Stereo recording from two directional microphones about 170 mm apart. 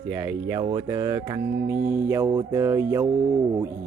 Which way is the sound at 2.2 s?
20° right (ahead or behind).